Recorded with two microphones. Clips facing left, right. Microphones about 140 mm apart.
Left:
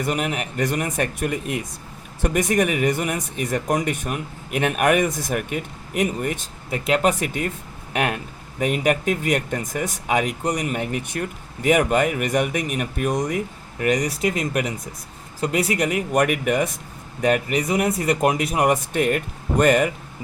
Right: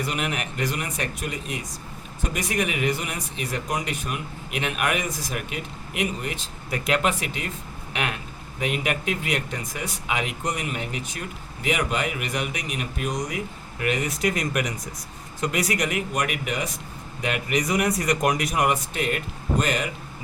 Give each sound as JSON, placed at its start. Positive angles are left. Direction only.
{"t": 0.0, "sound": "speech", "side_deg": 45}
{"t": 6.7, "sound": "speech", "side_deg": 30}
{"t": 13.7, "sound": "speech", "side_deg": 40}
{"t": 14.2, "sound": "speech", "side_deg": 25}
{"t": 16.1, "sound": "speech", "side_deg": 50}
{"t": 17.6, "sound": "speech", "side_deg": 30}
{"t": 18.7, "sound": "speech", "side_deg": 50}